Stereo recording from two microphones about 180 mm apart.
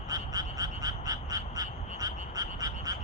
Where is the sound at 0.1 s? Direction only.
20° right (ahead or behind).